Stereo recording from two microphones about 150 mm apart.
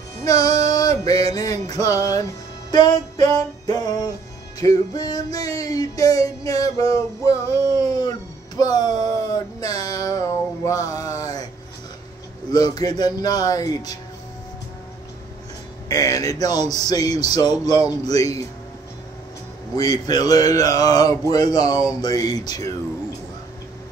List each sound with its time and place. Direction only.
0.2 s music: 25° left (ahead or behind)
8.5 s a sound: 25° left (ahead or behind)
12.4 s music: 25° left (ahead or behind)
15.9 s music: 25° left (ahead or behind)
19.7 s music: 25° left (ahead or behind)